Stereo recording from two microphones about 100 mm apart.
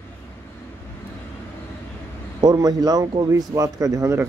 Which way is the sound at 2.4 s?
40° right (ahead or behind).